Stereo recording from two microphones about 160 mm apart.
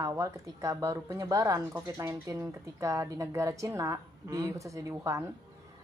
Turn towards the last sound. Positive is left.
turn(degrees=-20)  # may be behind; listen again after turning